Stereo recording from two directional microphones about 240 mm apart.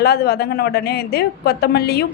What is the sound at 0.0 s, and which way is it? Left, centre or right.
A woman's voice, left.